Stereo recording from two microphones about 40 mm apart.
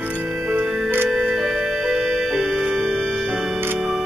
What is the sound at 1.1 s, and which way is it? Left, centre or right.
Music, centre.